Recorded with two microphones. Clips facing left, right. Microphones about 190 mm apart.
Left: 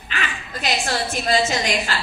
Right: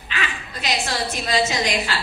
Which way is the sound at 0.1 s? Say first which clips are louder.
Even; 40° left (ahead or behind).